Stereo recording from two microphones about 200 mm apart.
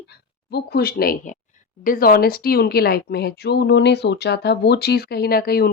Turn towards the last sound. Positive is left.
turn(degrees=50)  # may be behind; listen again after turning